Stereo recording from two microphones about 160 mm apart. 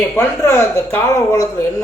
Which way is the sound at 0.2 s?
15° left (ahead or behind).